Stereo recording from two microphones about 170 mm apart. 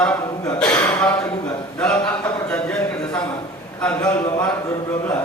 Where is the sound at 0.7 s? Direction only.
15° left (ahead or behind).